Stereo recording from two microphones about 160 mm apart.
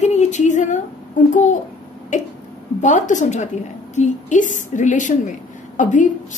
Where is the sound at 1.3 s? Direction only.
50° left (ahead or behind).